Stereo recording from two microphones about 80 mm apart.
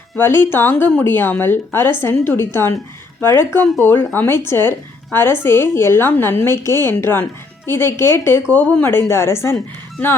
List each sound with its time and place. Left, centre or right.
0.2 s speech: left
8.4 s speech: centre
8.9 s speech: left